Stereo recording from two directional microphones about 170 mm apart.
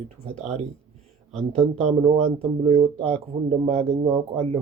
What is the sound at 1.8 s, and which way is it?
Speech, 40° right (ahead or behind).